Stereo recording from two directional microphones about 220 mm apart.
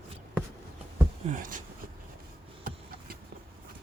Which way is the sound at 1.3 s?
35° right (ahead or behind).